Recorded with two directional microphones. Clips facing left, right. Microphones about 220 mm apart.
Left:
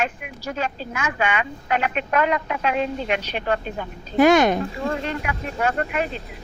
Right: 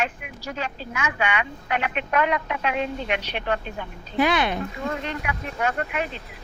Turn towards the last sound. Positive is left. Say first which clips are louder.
# left 3 dB
turn(degrees=40)  # may be behind; listen again after turning